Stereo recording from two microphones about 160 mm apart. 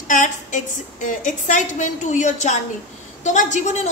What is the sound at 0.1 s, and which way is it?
A woman's voice, 55° left (ahead or behind).